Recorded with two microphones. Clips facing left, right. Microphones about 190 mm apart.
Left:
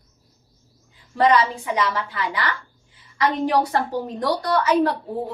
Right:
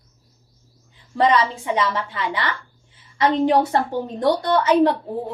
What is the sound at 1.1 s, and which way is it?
A woman's voice, 25° right (ahead or behind).